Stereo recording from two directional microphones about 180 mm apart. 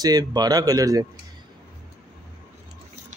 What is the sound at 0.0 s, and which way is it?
Speech, 20° right (ahead or behind).